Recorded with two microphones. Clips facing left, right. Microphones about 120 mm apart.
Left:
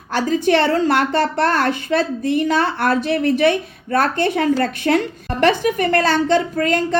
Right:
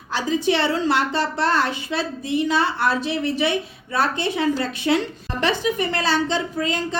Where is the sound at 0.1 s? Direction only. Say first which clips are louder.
Left 5 dB; 50° left (ahead or behind).